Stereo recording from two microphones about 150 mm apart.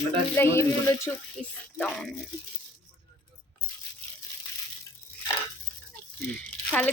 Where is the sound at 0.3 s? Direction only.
20° left (ahead or behind).